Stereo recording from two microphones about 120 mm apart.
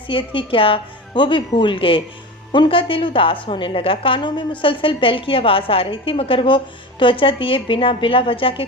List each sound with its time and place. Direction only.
0.1 s a woman's voice: 45° left (ahead or behind)